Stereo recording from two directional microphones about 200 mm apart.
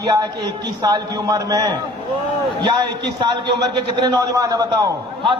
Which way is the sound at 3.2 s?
20° right (ahead or behind).